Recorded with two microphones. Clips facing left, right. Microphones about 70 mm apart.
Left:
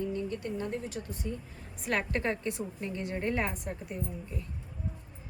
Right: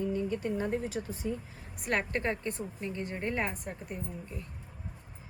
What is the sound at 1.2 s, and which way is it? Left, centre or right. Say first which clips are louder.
Speech: right 3 dB; right.